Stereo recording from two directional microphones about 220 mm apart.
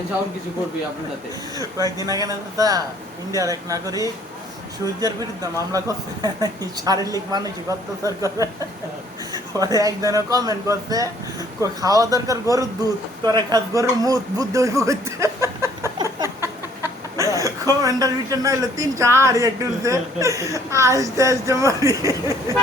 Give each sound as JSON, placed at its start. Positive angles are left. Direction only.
{"t": 2.0, "sound": "a woman's voice", "side_deg": -15}
{"t": 5.0, "sound": "a woman's voice", "side_deg": -15}
{"t": 16.4, "sound": "chicken", "side_deg": -10}
{"t": 17.3, "sound": "a woman's voice", "side_deg": -15}